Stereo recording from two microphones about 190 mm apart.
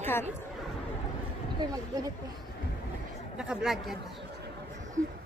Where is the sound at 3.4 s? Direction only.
5° right (ahead or behind).